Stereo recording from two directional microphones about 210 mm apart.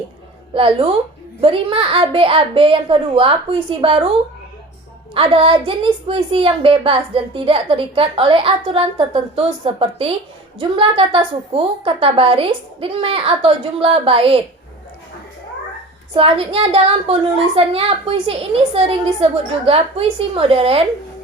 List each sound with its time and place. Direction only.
0.5 s a woman's voice: 25° right (ahead or behind)
5.1 s a woman's voice: 25° right (ahead or behind)
16.1 s a woman's voice: 25° right (ahead or behind)